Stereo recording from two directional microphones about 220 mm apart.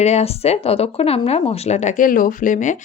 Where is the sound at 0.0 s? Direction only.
30° left (ahead or behind).